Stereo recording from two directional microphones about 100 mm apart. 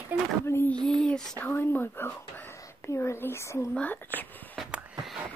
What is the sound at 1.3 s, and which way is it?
Whispering, 20° left (ahead or behind).